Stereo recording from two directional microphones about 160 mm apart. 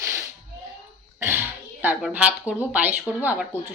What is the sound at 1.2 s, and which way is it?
Speech, 15° right (ahead or behind).